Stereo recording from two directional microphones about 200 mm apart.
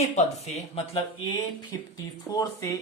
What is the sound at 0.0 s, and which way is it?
Speech, 35° left (ahead or behind).